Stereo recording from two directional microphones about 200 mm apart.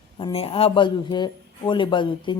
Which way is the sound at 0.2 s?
25° left (ahead or behind).